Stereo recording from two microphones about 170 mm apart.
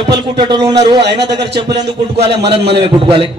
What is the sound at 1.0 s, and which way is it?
Speech, 85° right.